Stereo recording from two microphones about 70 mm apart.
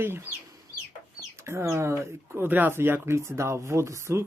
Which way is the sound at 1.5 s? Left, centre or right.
Right.